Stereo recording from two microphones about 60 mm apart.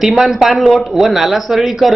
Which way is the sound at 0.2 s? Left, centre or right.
Centre.